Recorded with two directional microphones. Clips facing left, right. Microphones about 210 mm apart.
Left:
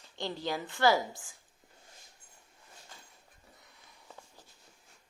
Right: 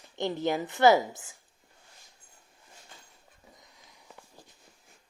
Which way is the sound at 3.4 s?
15° right (ahead or behind).